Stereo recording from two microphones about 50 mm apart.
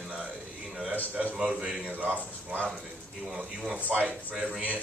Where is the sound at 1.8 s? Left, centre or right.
Right.